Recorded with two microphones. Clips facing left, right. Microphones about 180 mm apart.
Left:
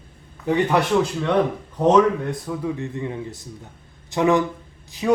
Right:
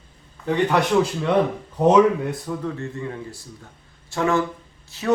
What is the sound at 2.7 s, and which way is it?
A man's voice, 15° left (ahead or behind).